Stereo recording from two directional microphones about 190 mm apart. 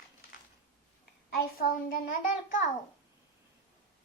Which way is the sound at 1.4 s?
50° left (ahead or behind).